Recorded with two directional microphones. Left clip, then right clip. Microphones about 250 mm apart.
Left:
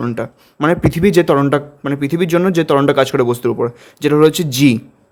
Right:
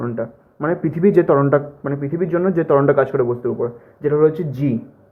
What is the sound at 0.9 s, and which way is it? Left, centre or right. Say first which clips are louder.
Speech: right 2 dB; left.